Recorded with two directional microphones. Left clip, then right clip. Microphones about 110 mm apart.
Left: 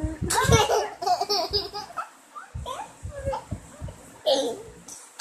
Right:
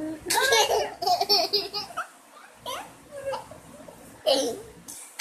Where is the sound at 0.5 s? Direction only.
Centre (ahead or behind).